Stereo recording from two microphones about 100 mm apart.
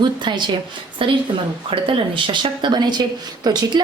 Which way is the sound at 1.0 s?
60° right (ahead or behind).